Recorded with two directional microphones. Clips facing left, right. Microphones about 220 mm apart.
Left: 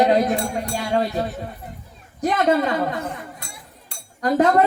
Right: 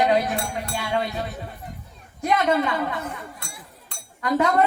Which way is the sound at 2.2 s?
35° left (ahead or behind).